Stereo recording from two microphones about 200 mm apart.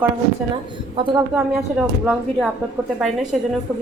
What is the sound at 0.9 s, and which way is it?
Speech, 25° right (ahead or behind).